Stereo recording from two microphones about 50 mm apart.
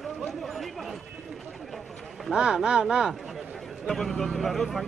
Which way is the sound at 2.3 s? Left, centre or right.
Centre.